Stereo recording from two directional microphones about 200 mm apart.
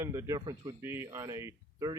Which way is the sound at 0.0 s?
15° right (ahead or behind).